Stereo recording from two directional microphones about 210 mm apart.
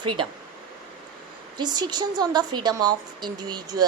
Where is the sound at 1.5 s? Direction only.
20° right (ahead or behind).